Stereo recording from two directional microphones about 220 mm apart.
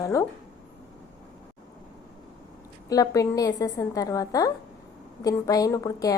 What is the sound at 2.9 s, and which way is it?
A woman's voice, 15° left (ahead or behind).